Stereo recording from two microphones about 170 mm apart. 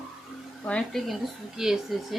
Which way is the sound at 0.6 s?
5° left (ahead or behind).